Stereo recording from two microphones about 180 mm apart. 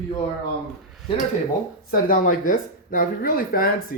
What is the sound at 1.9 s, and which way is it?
Speech, 50° left (ahead or behind).